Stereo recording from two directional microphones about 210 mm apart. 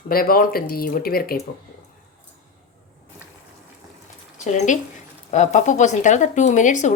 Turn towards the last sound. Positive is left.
turn(degrees=35)  # may be behind; listen again after turning